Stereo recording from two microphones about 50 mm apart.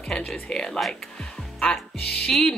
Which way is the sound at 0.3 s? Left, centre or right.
Centre.